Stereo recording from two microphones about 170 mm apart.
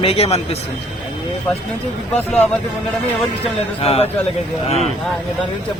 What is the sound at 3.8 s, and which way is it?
Speech, 35° left (ahead or behind).